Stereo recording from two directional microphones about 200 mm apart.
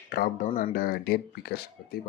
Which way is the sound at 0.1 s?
45° left (ahead or behind).